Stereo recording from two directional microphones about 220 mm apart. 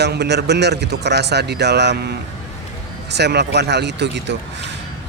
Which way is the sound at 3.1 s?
50° right (ahead or behind).